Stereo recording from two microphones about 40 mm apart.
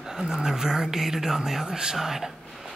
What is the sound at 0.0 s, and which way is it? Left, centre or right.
Speech, centre.